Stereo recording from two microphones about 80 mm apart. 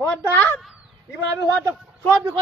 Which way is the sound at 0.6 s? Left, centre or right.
Centre.